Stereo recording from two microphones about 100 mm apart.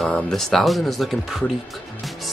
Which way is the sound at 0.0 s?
5° left (ahead or behind).